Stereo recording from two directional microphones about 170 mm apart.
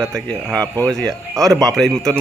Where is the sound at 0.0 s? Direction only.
5° left (ahead or behind).